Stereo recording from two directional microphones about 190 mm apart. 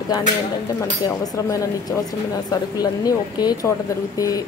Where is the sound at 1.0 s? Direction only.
20° left (ahead or behind).